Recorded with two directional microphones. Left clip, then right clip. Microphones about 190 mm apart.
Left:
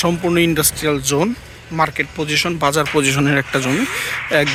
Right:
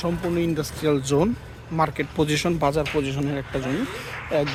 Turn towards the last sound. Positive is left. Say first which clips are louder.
# left 9 dB
turn(degrees=25)  # may be behind; listen again after turning